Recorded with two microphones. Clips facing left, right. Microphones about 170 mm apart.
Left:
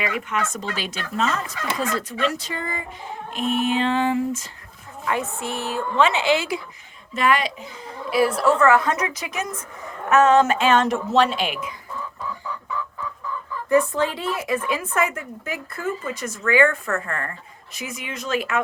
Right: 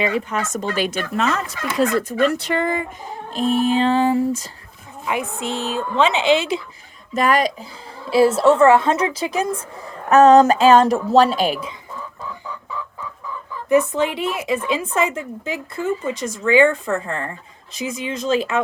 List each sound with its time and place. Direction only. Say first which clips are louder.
0.0 s speech: right 4 dB; 35° right (ahead or behind)
2.4 s speech: right 9 dB; 70° right (ahead or behind)
3.3 s a woman's voice: right 4 dB; 35° right (ahead or behind)
5.0 s a woman's voice: right 2 dB; 15° right (ahead or behind)
7.1 s a woman's voice: right 3 dB; 40° right (ahead or behind)
8.1 s a woman's voice: right 5 dB; 25° right (ahead or behind)
13.7 s a woman's voice: right 2 dB; 20° right (ahead or behind)